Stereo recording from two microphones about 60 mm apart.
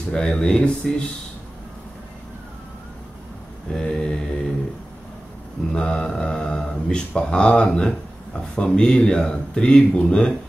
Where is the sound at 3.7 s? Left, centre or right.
Centre.